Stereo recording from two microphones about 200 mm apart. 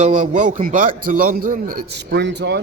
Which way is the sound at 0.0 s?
40° right (ahead or behind).